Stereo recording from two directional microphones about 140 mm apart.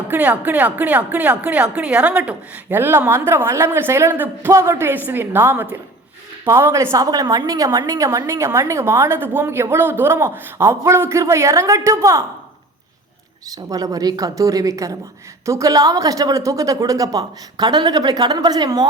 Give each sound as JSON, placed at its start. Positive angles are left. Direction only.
{"t": 0.1, "sound": "a woman's voice", "side_deg": -10}
{"t": 13.7, "sound": "a woman's voice", "side_deg": -25}